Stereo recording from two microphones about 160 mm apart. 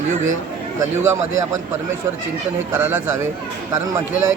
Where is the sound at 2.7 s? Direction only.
15° right (ahead or behind).